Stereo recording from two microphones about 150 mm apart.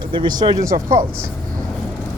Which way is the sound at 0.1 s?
30° right (ahead or behind).